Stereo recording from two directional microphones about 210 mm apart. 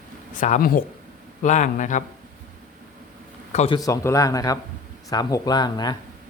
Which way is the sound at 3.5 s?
30° left (ahead or behind).